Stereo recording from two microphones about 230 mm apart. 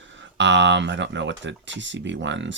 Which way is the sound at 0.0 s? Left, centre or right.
Right.